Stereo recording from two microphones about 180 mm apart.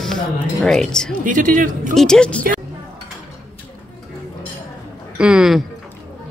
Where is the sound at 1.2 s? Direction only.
45° right (ahead or behind).